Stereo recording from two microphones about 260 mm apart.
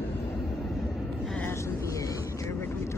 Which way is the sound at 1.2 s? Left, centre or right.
Centre.